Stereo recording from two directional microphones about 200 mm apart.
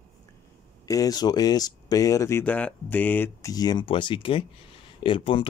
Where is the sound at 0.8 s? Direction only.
15° left (ahead or behind).